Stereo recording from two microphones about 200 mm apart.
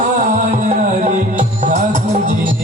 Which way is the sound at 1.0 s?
40° right (ahead or behind).